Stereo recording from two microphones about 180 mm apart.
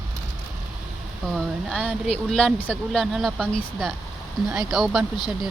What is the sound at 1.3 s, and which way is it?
Speech, 5° left (ahead or behind).